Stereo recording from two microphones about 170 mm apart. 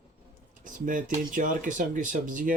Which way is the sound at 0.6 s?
50° right (ahead or behind).